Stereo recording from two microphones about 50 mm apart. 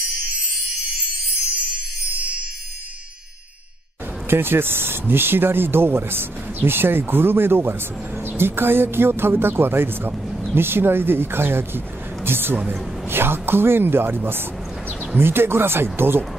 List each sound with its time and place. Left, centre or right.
1.7 s music: right
4.3 s speech: right